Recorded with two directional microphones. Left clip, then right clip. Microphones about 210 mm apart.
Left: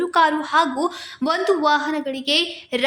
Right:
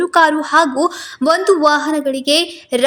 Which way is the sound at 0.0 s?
25° right (ahead or behind).